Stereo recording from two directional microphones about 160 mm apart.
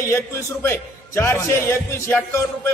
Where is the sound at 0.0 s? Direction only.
15° left (ahead or behind).